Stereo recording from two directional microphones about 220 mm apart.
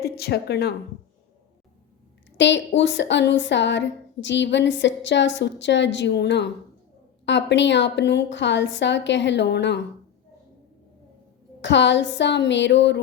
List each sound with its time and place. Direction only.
0.0 s speech: 45° left (ahead or behind)
2.4 s a woman's voice: 55° left (ahead or behind)
11.6 s a woman's voice: 55° left (ahead or behind)